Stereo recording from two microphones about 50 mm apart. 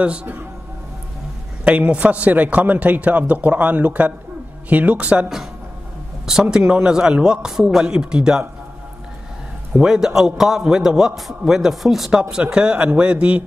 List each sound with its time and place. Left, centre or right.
0.0 s a man's voice: right
1.6 s a man's voice: right
6.4 s a man's voice: centre
9.8 s a man's voice: centre
12.2 s a man's voice: centre